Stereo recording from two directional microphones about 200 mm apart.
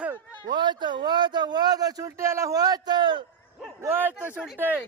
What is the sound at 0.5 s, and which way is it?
A man's voice, 20° right (ahead or behind).